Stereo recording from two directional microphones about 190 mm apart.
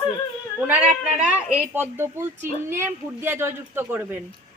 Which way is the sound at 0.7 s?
10° right (ahead or behind).